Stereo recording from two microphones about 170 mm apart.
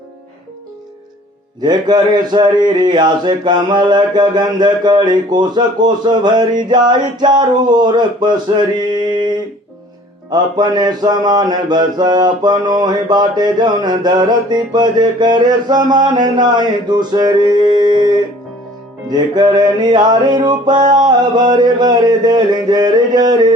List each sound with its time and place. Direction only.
1.6 s mantra: 25° right (ahead or behind)
19.1 s mantra: 25° right (ahead or behind)